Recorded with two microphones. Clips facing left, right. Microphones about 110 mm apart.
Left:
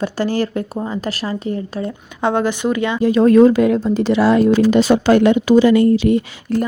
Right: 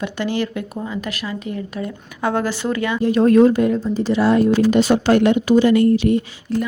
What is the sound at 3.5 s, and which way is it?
Speech, 90° left.